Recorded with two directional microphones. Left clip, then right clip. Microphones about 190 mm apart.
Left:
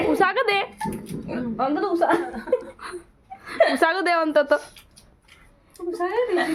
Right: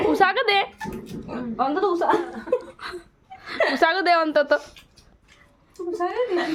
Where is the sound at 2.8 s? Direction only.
Centre (ahead or behind).